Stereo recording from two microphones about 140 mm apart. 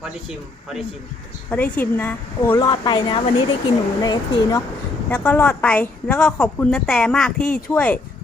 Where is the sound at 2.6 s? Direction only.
30° left (ahead or behind).